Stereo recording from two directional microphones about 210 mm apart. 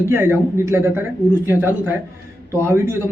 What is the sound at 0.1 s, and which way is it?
A man's voice, 10° right (ahead or behind).